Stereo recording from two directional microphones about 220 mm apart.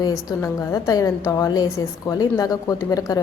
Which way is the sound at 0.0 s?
15° left (ahead or behind).